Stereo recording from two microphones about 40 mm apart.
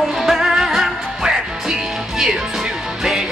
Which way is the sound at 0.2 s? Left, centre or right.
Centre.